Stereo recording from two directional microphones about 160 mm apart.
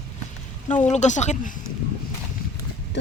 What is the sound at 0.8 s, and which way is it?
Speech, 45° left (ahead or behind).